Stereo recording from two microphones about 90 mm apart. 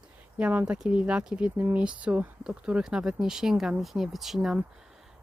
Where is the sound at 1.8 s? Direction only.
10° right (ahead or behind).